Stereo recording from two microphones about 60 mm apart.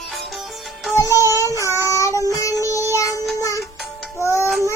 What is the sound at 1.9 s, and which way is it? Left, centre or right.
Music, left.